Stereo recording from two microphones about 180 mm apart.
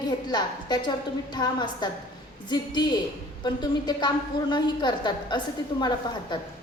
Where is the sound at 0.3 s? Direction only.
25° left (ahead or behind).